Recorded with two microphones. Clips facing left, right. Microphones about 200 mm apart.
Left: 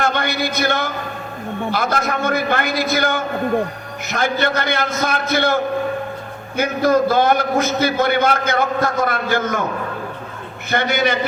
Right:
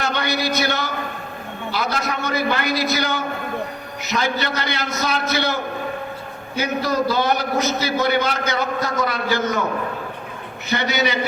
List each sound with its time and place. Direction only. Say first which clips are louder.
0.0 s a man's voice: left 2 dB; 50° left (ahead or behind)
6.6 s a man's voice: left 5 dB; 50° left (ahead or behind)
10.7 s a man's voice: left 3 dB; 50° left (ahead or behind)